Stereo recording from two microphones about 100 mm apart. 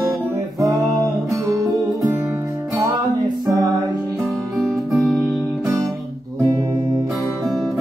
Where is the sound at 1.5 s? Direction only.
35° right (ahead or behind).